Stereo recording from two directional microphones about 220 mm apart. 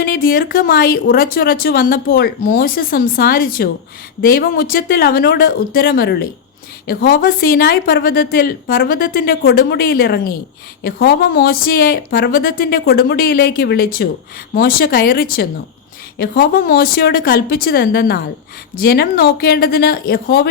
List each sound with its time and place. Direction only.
0.0 s a woman's voice: 40° left (ahead or behind)